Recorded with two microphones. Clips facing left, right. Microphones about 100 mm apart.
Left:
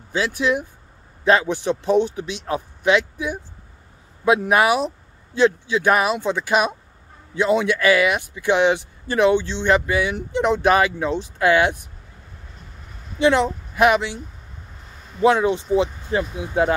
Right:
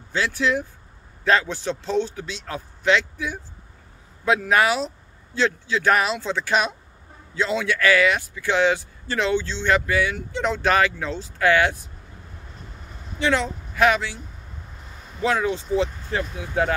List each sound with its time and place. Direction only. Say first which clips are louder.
0.1 s speech: left 2 dB; 15° left (ahead or behind)
13.2 s speech: left 5 dB; 20° left (ahead or behind)
15.2 s speech: left 6 dB; 20° left (ahead or behind)